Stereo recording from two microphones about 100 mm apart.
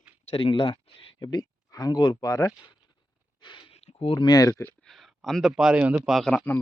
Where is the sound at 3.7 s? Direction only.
85° left.